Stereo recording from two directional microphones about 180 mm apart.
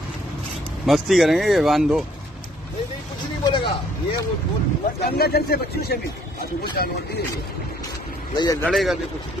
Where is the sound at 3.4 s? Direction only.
25° left (ahead or behind).